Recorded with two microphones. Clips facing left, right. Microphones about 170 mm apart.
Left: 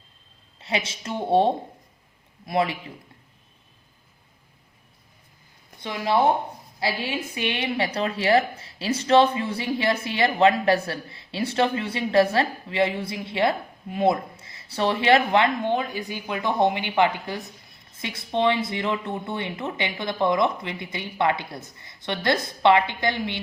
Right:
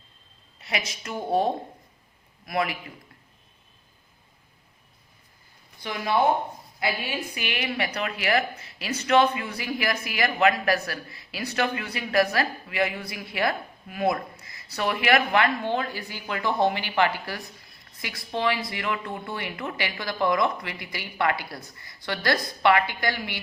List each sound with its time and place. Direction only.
0.6 s a woman's voice: 30° left (ahead or behind)
5.8 s a woman's voice: 25° left (ahead or behind)